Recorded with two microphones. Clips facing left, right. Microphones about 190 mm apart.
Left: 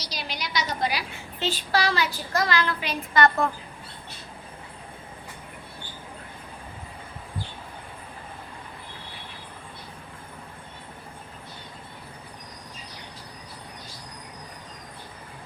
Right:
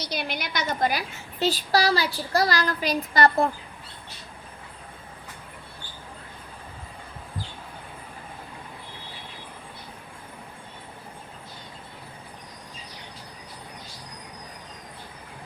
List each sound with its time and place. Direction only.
0.0 s a woman's voice: 60° right (ahead or behind); by 3.5 s 35° right (ahead or behind)